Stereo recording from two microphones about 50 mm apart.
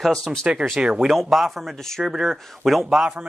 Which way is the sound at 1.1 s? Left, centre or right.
Centre.